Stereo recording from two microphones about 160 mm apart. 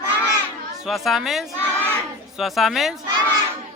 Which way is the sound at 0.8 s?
Centre (ahead or behind).